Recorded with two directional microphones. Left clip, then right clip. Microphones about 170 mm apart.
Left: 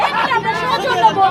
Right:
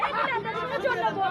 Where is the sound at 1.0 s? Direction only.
30° left (ahead or behind).